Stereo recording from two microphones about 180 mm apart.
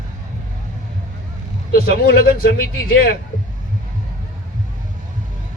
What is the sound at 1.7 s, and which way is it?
A man's voice, 55° left (ahead or behind).